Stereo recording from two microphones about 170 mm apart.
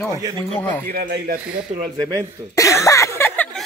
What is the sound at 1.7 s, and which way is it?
Speech, 40° right (ahead or behind).